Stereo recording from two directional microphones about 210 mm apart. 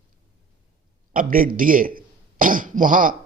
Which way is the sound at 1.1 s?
40° right (ahead or behind).